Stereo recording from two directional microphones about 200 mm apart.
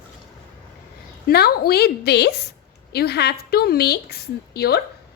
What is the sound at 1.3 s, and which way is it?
A woman's voice, 50° left (ahead or behind).